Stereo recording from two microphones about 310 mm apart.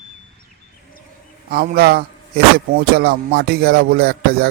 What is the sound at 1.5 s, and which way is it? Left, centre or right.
A man's voice, right.